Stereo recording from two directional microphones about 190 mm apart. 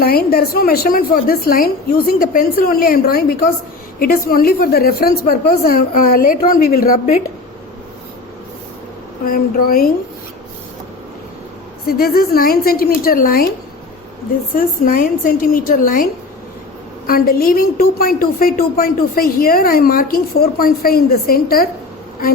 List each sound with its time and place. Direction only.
0.0 s a woman's voice: 55° left (ahead or behind)
9.2 s a woman's voice: 50° left (ahead or behind)
11.9 s a woman's voice: 50° left (ahead or behind)
14.5 s a woman's voice: 50° left (ahead or behind)
17.1 s a woman's voice: 50° left (ahead or behind)